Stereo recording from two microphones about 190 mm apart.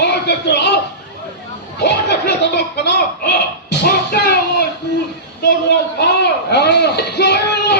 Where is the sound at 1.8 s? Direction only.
60° left (ahead or behind).